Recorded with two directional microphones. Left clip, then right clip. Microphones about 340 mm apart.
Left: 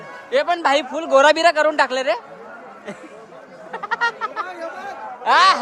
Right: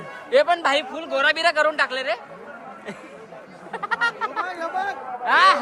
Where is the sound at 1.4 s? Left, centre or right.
Centre.